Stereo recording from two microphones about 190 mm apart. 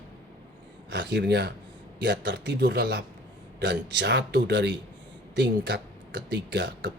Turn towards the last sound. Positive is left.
turn(degrees=-60)  # may be behind; listen again after turning